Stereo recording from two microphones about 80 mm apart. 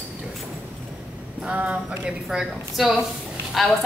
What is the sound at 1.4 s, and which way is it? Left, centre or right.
Speech, centre.